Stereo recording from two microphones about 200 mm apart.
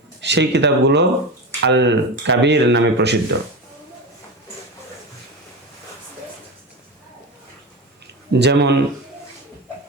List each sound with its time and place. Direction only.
0.2 s speech: 60° right (ahead or behind)
8.3 s speech: 60° right (ahead or behind)